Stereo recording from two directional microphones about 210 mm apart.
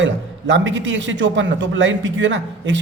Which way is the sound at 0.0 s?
60° right (ahead or behind).